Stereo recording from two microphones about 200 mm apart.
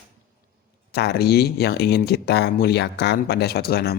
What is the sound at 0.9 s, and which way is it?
Speech, 55° left (ahead or behind).